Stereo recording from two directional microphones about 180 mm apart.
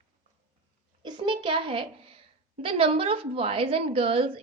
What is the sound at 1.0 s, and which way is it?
A child's voice, 25° right (ahead or behind).